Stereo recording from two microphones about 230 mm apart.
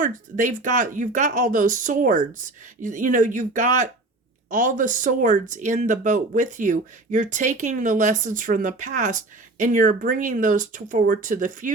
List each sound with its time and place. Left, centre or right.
0.0 s speech: right